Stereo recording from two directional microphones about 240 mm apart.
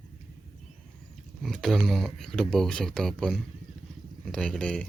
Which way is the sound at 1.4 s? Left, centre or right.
Centre.